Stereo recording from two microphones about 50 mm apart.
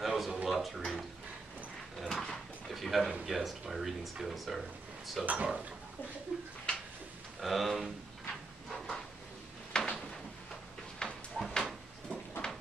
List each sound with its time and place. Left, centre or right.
0.0 s a sound: centre
2.0 s drawer open or close: centre
3.3 s speech: centre
5.2 s speech: right
6.3 s a sound: centre
7.3 s speech: centre
8.6 s drawer open or close: centre
9.7 s a sound: centre
11.3 s drawer open or close: centre
12.4 s horse: centre